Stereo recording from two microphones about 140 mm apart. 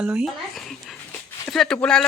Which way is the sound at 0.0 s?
5° right (ahead or behind).